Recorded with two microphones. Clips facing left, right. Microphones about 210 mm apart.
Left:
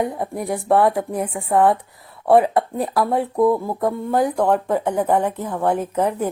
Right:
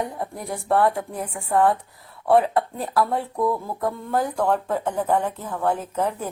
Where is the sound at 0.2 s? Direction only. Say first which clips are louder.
Left 6 dB; 15° left (ahead or behind).